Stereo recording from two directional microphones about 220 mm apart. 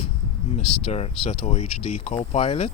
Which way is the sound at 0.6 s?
90° left.